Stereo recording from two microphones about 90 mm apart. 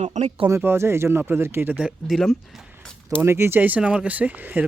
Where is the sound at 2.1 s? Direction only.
Centre (ahead or behind).